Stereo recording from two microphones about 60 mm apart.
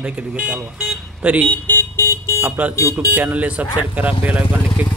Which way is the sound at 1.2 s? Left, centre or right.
Right.